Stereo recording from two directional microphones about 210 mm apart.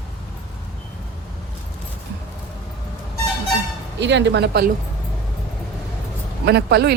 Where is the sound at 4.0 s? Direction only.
55° right (ahead or behind).